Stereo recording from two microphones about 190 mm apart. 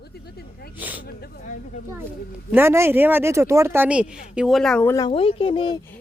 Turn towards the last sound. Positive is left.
turn(degrees=25)  # may be behind; listen again after turning